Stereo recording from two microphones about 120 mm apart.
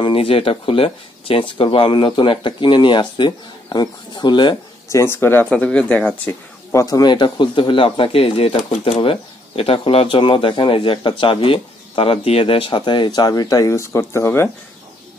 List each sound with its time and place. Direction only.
0.0 s a man's voice: 50° left (ahead or behind)
4.8 s speech: 25° left (ahead or behind)
6.7 s a man's voice: 25° left (ahead or behind)